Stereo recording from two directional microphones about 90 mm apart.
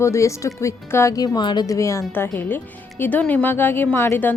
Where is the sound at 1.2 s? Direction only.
55° left (ahead or behind).